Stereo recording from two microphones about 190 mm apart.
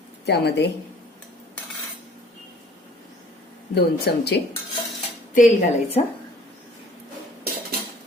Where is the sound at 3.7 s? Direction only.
60° left (ahead or behind).